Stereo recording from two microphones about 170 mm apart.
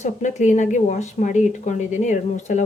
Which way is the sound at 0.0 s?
45° left (ahead or behind).